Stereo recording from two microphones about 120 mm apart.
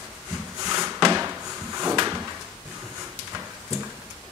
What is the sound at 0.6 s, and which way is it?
Drawer open or close, 25° right (ahead or behind).